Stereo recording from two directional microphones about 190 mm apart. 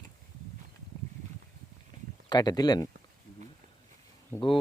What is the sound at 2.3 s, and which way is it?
Speech, 20° left (ahead or behind).